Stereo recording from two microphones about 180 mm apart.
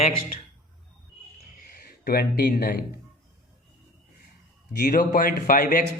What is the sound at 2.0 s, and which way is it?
Speech, 60° left (ahead or behind).